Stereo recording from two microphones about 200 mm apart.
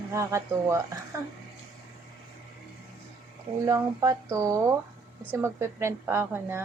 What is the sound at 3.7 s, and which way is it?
A woman's voice, 15° right (ahead or behind).